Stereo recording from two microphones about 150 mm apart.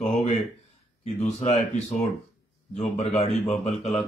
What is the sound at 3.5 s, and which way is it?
Speech, 45° left (ahead or behind).